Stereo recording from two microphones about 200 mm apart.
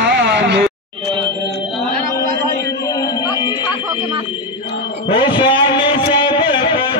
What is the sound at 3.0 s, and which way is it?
Music, 20° left (ahead or behind).